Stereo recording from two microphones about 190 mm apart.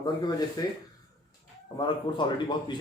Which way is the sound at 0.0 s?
20° left (ahead or behind).